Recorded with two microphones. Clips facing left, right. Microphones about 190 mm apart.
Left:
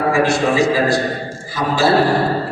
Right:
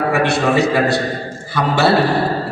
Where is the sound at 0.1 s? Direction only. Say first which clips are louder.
Left 1 dB; 65° right (ahead or behind).